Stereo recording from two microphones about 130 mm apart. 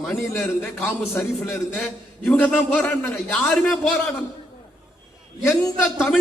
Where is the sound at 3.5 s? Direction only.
5° left (ahead or behind).